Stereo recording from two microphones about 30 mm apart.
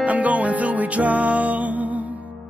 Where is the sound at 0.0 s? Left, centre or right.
Right.